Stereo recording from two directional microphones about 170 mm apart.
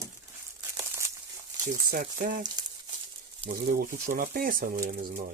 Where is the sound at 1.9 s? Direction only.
55° right (ahead or behind).